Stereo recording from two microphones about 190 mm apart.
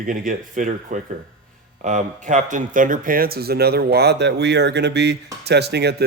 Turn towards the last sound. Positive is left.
turn(degrees=-60)  # may be behind; listen again after turning